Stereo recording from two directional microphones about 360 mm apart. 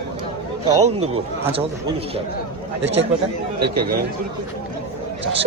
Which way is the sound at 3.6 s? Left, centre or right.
Right.